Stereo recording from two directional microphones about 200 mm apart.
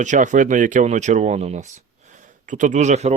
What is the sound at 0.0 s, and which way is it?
Speech, 40° right (ahead or behind).